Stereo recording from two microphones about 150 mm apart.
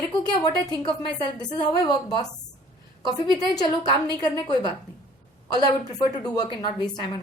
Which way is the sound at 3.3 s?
25° left (ahead or behind).